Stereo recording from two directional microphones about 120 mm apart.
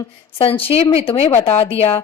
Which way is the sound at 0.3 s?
50° left (ahead or behind).